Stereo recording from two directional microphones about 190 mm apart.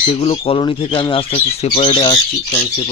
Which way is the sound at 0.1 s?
30° left (ahead or behind).